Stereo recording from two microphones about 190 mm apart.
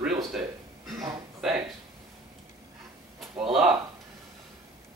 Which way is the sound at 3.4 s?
Centre (ahead or behind).